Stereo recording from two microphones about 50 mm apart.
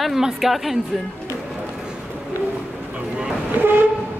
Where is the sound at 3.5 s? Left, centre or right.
Right.